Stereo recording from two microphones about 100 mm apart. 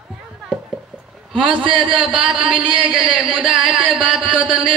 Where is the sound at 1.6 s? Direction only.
55° right (ahead or behind).